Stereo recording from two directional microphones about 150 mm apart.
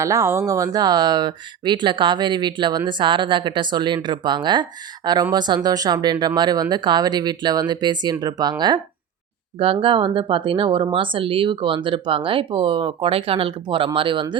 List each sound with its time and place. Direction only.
0.0 s speech: 20° right (ahead or behind)